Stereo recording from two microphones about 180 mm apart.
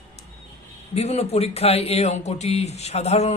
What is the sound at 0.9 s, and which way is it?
Speech, 35° left (ahead or behind).